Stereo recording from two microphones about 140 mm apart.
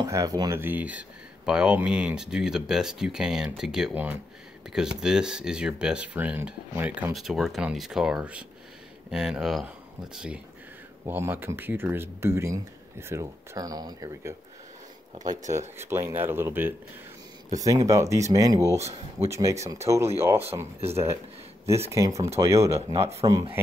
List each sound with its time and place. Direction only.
0.0 s speech: 25° right (ahead or behind)
7.2 s speech: centre (ahead or behind); by 14.3 s 25° right (ahead or behind)
15.5 s speech: 20° right (ahead or behind)
21.6 s speech: 20° right (ahead or behind)
22.9 s speech: 50° right (ahead or behind)